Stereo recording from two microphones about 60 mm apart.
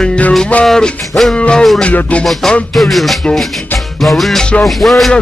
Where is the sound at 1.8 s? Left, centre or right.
Left.